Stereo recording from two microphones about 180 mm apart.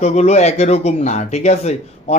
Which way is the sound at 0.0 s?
40° left (ahead or behind).